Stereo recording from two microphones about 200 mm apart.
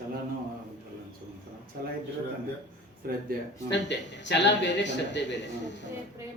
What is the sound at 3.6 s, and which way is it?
A man's voice, 60° left (ahead or behind).